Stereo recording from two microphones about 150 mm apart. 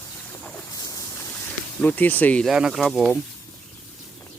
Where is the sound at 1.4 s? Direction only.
10° left (ahead or behind).